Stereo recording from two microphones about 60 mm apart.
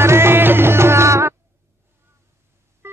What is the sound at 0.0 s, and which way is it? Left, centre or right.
Music, right.